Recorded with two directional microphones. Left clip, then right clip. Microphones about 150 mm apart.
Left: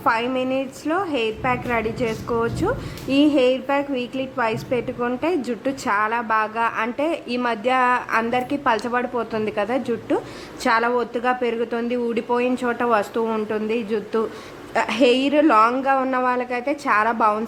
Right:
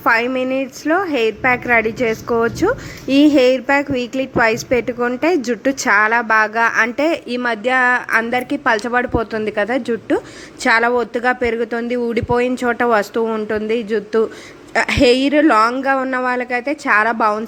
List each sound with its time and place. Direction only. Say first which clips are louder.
0.0 s a woman's voice: right 5 dB; 25° right (ahead or behind)